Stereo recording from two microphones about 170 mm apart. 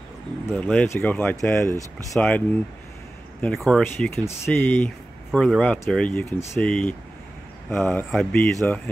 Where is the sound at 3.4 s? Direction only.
Centre (ahead or behind).